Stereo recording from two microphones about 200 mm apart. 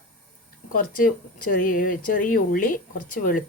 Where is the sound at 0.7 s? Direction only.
45° left (ahead or behind).